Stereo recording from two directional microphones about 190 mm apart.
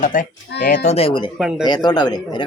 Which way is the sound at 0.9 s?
30° left (ahead or behind).